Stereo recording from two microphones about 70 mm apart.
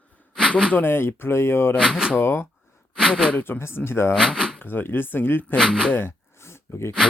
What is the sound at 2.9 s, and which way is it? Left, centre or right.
Speech, centre.